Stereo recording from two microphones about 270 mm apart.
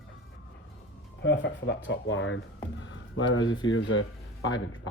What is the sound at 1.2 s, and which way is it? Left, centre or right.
Speech, left.